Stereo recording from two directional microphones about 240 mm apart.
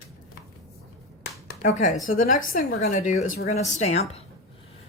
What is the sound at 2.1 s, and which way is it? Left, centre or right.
A woman's voice, left.